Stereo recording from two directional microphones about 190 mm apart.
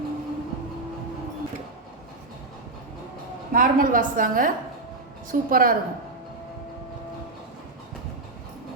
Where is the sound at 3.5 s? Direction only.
45° right (ahead or behind).